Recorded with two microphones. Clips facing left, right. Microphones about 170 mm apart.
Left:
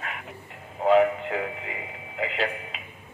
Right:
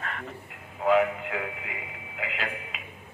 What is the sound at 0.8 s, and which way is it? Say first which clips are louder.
Speech: left 3 dB; 30° left (ahead or behind).